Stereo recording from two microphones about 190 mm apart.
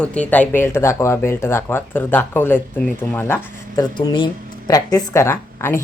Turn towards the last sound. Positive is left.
turn(degrees=15)  # may be behind; listen again after turning